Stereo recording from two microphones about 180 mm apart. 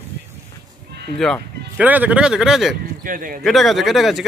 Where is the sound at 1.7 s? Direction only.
10° right (ahead or behind).